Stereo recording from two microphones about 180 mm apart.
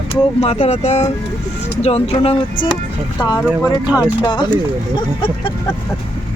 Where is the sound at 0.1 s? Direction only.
35° left (ahead or behind).